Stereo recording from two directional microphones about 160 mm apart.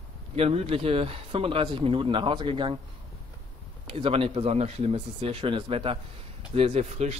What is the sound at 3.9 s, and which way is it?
A man's voice, 35° right (ahead or behind).